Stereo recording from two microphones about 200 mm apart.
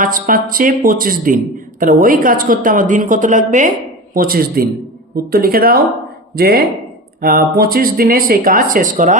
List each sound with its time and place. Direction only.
0.0 s speech: 45° right (ahead or behind)